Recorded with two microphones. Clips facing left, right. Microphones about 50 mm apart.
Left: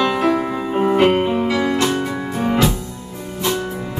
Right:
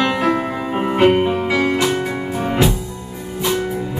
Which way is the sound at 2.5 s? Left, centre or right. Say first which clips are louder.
Even; centre.